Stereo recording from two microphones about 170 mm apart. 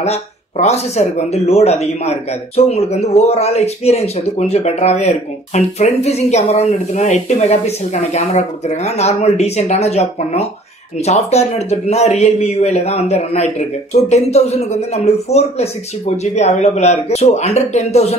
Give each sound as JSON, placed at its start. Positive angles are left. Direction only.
{"t": 0.0, "sound": "speech", "side_deg": 40}